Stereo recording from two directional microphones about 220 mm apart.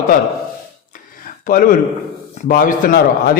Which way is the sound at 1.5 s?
40° left (ahead or behind).